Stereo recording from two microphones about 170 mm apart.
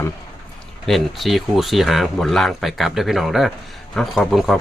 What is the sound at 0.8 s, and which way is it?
Speech, centre (ahead or behind).